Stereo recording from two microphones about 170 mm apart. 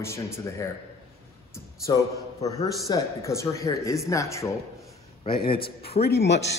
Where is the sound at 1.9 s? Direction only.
20° left (ahead or behind).